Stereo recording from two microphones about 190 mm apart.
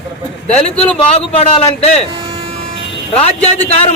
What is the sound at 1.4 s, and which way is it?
Speech, 35° left (ahead or behind).